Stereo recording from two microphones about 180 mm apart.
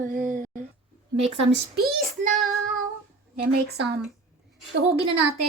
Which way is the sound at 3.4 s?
65° right (ahead or behind).